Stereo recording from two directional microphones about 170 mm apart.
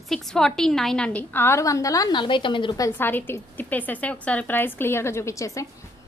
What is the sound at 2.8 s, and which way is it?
A woman's voice, 15° left (ahead or behind).